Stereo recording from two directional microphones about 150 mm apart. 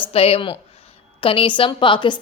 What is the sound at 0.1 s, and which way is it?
A woman's voice, 40° left (ahead or behind).